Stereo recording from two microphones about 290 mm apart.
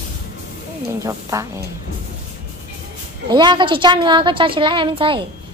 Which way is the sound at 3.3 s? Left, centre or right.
Centre.